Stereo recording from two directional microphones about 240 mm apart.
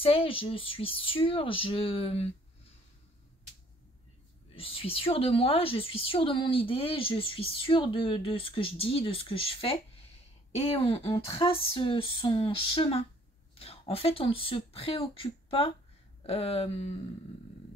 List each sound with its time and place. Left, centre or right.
0.0 s a woman's voice: left
4.6 s a woman's voice: left